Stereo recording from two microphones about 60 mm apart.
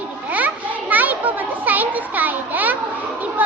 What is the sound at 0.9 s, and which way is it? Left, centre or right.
Children playing, right.